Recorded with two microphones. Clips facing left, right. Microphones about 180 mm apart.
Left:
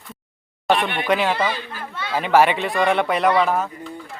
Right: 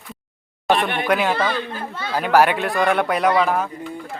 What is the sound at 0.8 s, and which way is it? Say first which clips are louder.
Speech: right 1 dB; 45° right (ahead or behind).